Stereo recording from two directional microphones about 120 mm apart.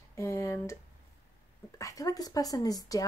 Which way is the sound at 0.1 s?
25° left (ahead or behind).